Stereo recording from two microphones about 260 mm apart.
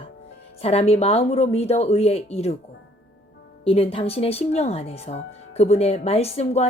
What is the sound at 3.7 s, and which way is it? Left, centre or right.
Speech, left.